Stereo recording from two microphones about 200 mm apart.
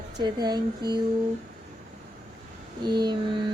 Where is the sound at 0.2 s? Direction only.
20° right (ahead or behind).